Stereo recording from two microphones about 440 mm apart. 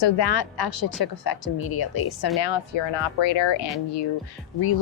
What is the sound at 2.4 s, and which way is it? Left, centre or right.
Speech, left.